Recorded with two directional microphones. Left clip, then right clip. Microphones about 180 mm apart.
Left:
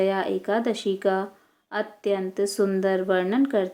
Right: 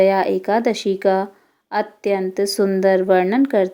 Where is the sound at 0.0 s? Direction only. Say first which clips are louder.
Right 8 dB; 35° right (ahead or behind).